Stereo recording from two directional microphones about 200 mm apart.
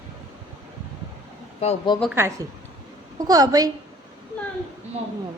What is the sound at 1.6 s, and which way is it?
Speech, 30° left (ahead or behind).